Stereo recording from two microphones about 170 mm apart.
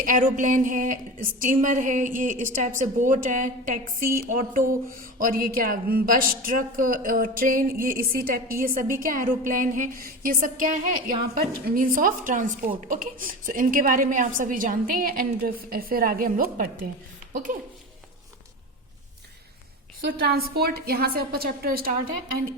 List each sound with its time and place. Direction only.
0.0 s a woman's voice: 55° right (ahead or behind)
20.2 s a woman's voice: 65° right (ahead or behind)